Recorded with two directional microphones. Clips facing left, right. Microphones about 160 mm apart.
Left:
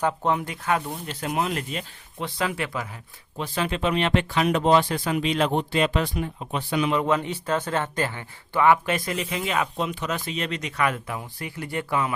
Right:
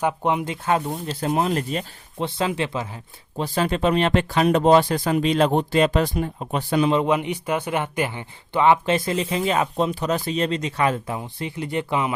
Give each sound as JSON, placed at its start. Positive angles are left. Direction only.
{"t": 0.0, "sound": "speech", "side_deg": -15}
{"t": 2.2, "sound": "speech", "side_deg": -25}
{"t": 6.9, "sound": "speech", "side_deg": -20}